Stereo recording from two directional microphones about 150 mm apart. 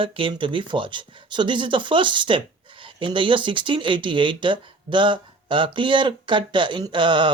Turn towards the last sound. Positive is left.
turn(degrees=-30)  # may be behind; listen again after turning